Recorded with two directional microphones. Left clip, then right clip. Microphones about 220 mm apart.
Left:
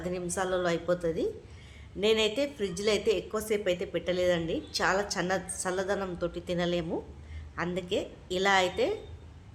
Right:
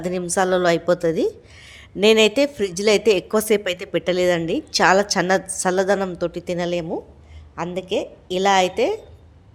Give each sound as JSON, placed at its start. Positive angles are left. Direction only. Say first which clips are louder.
{"t": 0.0, "sound": "a woman's voice", "louder": "right 11 dB", "side_deg": -35}